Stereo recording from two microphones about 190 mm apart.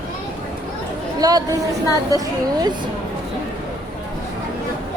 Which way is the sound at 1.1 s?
20° right (ahead or behind).